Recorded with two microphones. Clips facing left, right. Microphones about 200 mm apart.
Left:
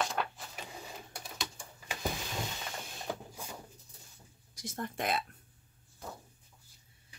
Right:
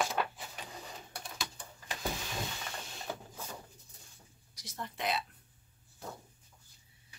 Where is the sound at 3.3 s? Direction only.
10° left (ahead or behind).